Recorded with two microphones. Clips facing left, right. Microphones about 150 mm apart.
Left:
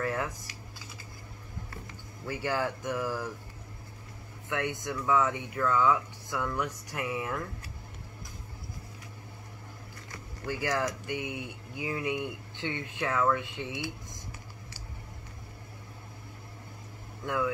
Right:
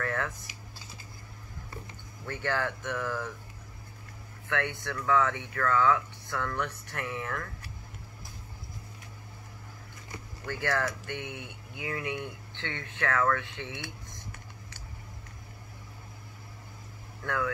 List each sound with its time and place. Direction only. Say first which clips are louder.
0.0 s speech: left 1 dB; 10° left (ahead or behind)
2.2 s speech: left 1 dB; 10° left (ahead or behind)
4.5 s speech: even; 15° left (ahead or behind)
10.4 s speech: even; 10° left (ahead or behind)
17.2 s speech: left 1 dB; 15° left (ahead or behind)